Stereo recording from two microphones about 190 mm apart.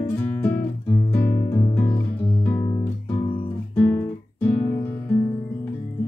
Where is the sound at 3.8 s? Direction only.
10° left (ahead or behind).